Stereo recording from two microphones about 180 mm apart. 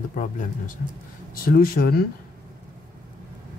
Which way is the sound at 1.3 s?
55° left (ahead or behind).